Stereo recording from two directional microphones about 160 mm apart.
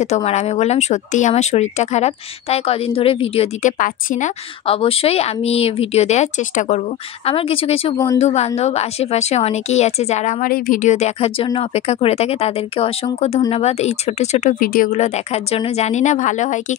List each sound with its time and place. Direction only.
0.0 s a woman's voice: 45° left (ahead or behind)
3.6 s a woman's voice: 50° left (ahead or behind)
4.6 s a woman's voice: 35° left (ahead or behind)
14.6 s a woman's voice: 60° left (ahead or behind)